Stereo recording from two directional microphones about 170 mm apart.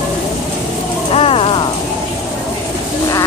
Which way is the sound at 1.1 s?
35° left (ahead or behind).